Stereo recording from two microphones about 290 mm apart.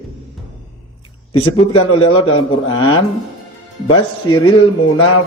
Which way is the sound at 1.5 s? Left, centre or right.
Centre.